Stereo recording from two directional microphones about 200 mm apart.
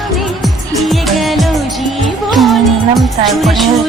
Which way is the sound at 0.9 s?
Centre (ahead or behind).